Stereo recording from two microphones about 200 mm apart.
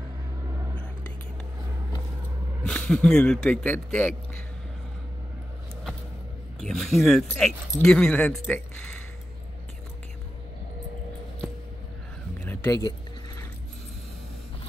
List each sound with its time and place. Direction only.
2.6 s speech: 5° left (ahead or behind)
6.6 s speech: centre (ahead or behind)
12.4 s a sound: 10° left (ahead or behind)